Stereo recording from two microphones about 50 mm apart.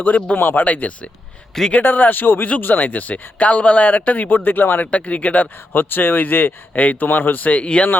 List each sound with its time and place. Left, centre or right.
0.0 s speech: left
1.8 s speech: left
4.9 s speech: left
5.7 s speech: left